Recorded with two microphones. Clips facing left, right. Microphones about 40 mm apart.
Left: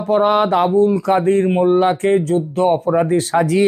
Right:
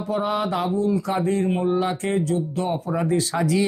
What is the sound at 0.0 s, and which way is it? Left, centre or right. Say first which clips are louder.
Speech: left 9 dB; left.